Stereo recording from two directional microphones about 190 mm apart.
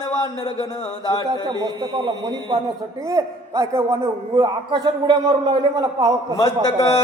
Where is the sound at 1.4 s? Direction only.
25° right (ahead or behind).